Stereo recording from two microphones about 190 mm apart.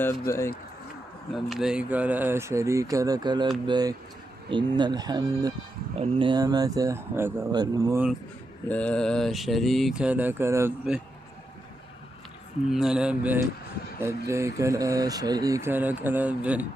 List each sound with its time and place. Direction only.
0.0 s speech: 15° left (ahead or behind)
1.3 s speech: centre (ahead or behind); by 7.9 s 20° right (ahead or behind)
8.6 s speech: 5° left (ahead or behind)
12.7 s speech: 5° right (ahead or behind)